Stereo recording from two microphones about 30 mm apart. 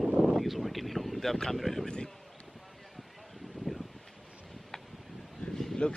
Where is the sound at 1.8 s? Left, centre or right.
Left.